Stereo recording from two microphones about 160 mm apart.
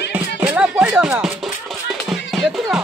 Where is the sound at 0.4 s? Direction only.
5° right (ahead or behind).